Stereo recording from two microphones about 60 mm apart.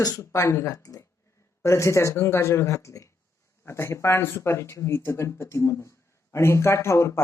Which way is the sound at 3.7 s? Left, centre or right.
Left.